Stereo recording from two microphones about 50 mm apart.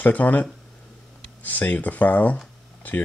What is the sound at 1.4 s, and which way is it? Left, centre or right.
Speech, left.